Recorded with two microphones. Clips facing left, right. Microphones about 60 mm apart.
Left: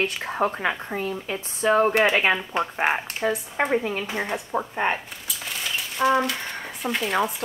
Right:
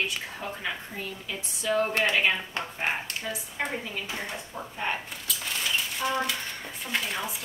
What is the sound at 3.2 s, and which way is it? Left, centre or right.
Speech, left.